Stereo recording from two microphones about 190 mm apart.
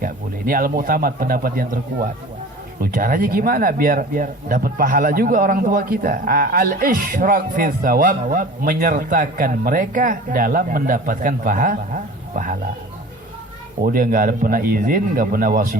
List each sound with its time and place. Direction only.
0.0 s speech: 45° right (ahead or behind)
13.8 s speech: 45° right (ahead or behind)